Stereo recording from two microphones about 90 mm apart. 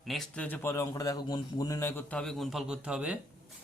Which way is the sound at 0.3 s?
20° left (ahead or behind).